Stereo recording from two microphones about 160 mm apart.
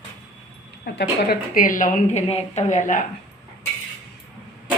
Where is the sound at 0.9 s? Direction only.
90° left.